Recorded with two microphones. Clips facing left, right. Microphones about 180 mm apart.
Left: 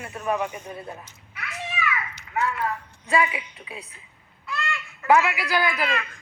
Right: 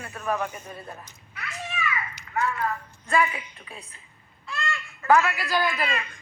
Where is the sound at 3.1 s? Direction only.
15° left (ahead or behind).